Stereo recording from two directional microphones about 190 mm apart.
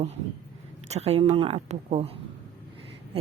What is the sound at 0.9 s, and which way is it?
A woman's voice, 35° right (ahead or behind).